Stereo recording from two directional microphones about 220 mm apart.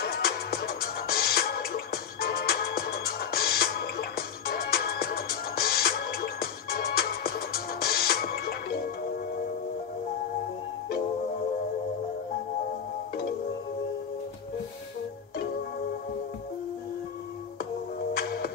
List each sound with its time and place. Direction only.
0.0 s music: 45° left (ahead or behind)
18.1 s music: 45° left (ahead or behind)